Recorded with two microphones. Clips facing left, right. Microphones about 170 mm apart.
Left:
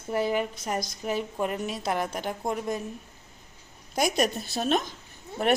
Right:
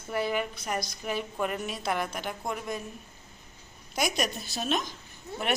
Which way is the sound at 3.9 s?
30° left (ahead or behind).